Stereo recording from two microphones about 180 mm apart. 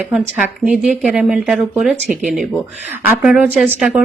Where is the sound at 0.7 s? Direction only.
5° right (ahead or behind).